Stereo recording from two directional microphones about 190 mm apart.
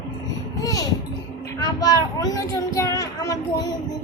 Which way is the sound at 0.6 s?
20° left (ahead or behind).